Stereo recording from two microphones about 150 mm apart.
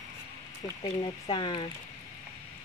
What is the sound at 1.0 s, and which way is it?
Speech, 30° left (ahead or behind).